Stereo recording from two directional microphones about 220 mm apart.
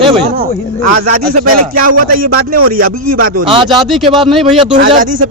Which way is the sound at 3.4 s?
25° right (ahead or behind).